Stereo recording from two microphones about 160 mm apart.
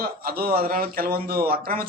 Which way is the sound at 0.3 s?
70° right (ahead or behind).